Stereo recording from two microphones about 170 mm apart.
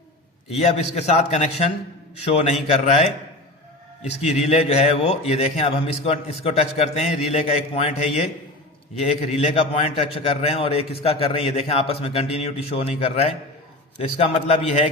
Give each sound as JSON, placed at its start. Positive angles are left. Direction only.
{"t": 0.6, "sound": "a man's voice", "side_deg": 40}
{"t": 4.2, "sound": "a man's voice", "side_deg": 40}